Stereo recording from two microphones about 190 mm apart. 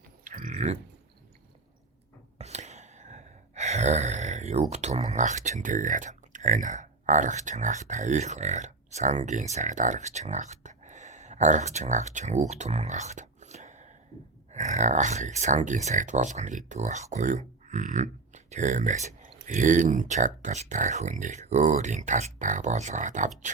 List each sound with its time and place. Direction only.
0.3 s a sound: 45° right (ahead or behind)
2.4 s gasp: 35° right (ahead or behind)
4.7 s speech: 35° right (ahead or behind)